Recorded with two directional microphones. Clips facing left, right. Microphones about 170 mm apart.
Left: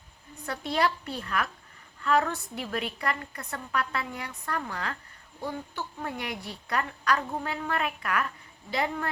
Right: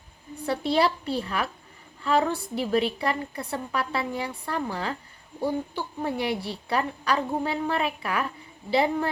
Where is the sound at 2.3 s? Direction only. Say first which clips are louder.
Right 6 dB; 30° right (ahead or behind).